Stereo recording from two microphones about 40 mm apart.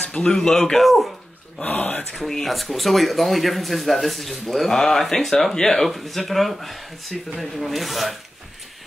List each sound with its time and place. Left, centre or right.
0.0 s a sound: left
0.3 s speech: centre
0.7 s speech: centre
2.1 s speech: centre